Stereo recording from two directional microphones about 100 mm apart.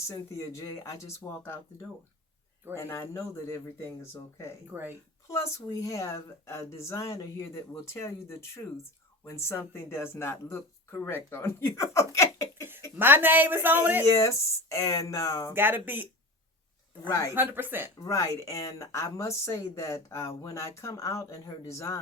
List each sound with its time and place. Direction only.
0.1 s speech: 30° left (ahead or behind)
2.7 s speech: 25° left (ahead or behind)
4.7 s speech: 20° right (ahead or behind)
5.3 s speech: 30° left (ahead or behind)
13.0 s speech: 20° right (ahead or behind)
14.0 s speech: 30° left (ahead or behind)
15.5 s speech: 20° right (ahead or behind)
17.1 s speech: 30° left (ahead or behind)
17.3 s speech: 20° right (ahead or behind)
18.0 s speech: 30° left (ahead or behind)